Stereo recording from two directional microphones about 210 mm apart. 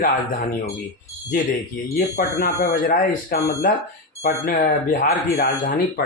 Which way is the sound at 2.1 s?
45° left (ahead or behind).